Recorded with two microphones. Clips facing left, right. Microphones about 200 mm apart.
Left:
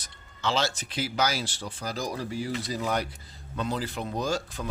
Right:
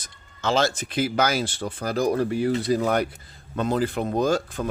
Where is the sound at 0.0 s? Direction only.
50° right (ahead or behind).